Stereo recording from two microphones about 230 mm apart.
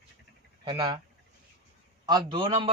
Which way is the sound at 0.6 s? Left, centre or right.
Centre.